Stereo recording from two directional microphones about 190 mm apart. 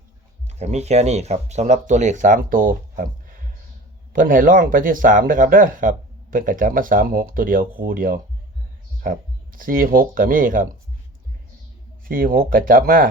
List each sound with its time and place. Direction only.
0.6 s speech: 35° right (ahead or behind)
4.1 s speech: 45° right (ahead or behind)
12.0 s speech: 50° right (ahead or behind)